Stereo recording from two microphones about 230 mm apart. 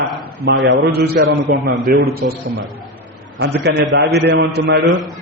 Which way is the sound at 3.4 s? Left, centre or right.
Right.